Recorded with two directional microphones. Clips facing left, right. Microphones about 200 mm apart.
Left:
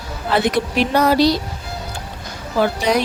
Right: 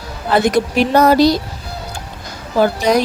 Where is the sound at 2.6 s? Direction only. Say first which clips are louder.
Right 4 dB; 45° right (ahead or behind).